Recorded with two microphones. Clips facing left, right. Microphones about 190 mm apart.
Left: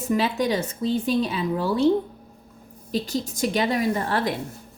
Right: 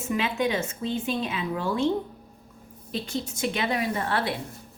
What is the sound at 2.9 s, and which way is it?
A woman's voice, 40° left (ahead or behind).